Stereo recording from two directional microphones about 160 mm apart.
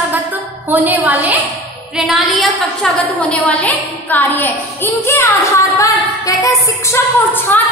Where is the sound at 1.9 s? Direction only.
Centre (ahead or behind).